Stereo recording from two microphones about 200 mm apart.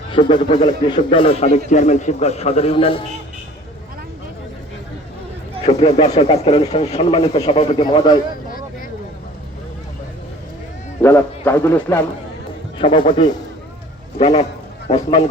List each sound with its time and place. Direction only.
0.1 s a man's voice: 25° left (ahead or behind)
5.6 s a man's voice: 35° left (ahead or behind)
8.4 s a sound: 45° left (ahead or behind)
11.0 s a man's voice: 10° left (ahead or behind)
12.8 s a man's voice: 25° left (ahead or behind)
14.2 s a man's voice: 35° left (ahead or behind)